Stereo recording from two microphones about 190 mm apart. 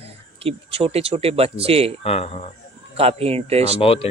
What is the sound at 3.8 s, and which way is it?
Speech, 30° left (ahead or behind).